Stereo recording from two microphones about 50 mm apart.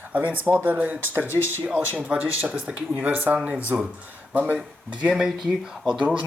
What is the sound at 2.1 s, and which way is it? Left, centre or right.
Speech, right.